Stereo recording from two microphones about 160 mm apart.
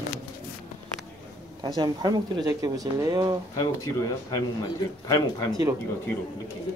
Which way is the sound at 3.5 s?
25° left (ahead or behind).